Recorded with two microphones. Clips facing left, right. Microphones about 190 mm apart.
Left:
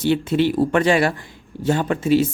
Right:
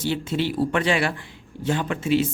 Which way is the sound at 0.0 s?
60° left (ahead or behind).